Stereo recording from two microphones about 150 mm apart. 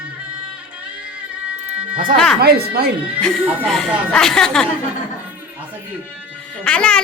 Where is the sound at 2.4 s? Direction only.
90° right.